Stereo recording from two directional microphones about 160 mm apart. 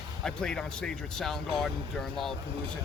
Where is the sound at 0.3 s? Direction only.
5° left (ahead or behind).